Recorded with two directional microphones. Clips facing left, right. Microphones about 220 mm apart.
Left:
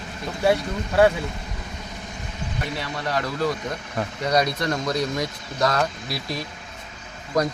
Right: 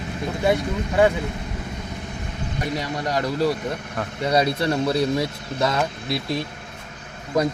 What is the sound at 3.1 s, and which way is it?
Speech, 15° right (ahead or behind).